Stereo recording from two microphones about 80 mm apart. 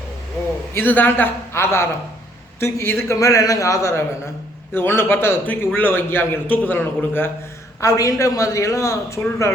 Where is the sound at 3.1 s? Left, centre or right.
Left.